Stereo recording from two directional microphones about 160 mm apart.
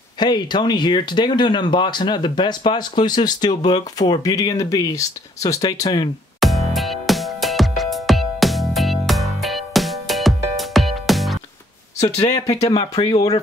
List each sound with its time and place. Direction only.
0.2 s speech: 25° left (ahead or behind)
6.4 s music: centre (ahead or behind)
12.0 s speech: 25° left (ahead or behind)